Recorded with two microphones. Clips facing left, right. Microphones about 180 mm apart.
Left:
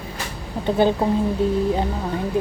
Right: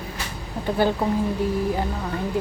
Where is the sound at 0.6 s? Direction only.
20° left (ahead or behind).